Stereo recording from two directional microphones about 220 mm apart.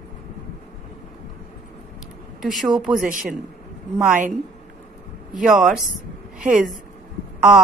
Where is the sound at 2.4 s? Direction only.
Centre (ahead or behind).